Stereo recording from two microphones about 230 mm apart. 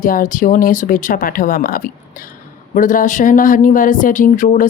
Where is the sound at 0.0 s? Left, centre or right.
Left.